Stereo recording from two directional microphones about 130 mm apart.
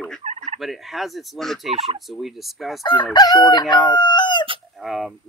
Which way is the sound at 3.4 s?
35° left (ahead or behind).